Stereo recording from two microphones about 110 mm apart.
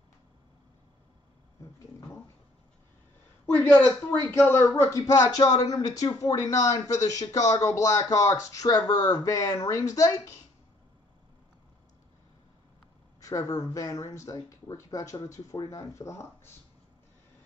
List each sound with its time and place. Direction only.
3.4 s speech: 20° left (ahead or behind)
4.7 s speech: 30° left (ahead or behind)
13.2 s speech: 30° left (ahead or behind)